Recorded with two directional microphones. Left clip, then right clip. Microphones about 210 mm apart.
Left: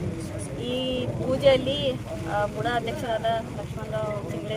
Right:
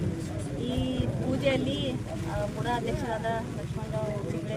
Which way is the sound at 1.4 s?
5° left (ahead or behind).